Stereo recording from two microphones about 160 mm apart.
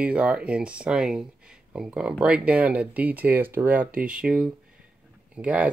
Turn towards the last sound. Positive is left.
turn(degrees=-10)  # may be behind; listen again after turning